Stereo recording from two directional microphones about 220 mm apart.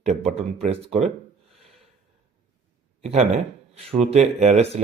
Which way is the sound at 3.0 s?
30° right (ahead or behind).